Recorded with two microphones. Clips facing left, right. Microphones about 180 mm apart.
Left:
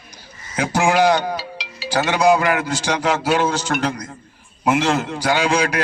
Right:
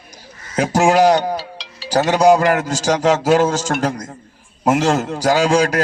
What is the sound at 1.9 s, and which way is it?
A man's voice, 40° right (ahead or behind).